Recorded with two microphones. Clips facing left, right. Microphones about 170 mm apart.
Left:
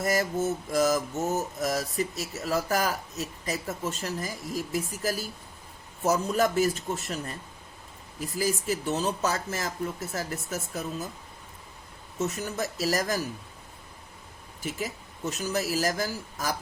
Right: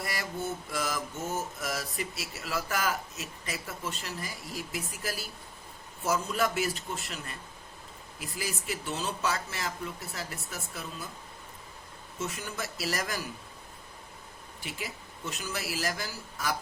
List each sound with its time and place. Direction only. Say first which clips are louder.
0.0 s mantra: left 9 dB; 45° left (ahead or behind)
12.2 s mantra: left 6 dB; 40° left (ahead or behind)
14.6 s mantra: left 7 dB; 40° left (ahead or behind)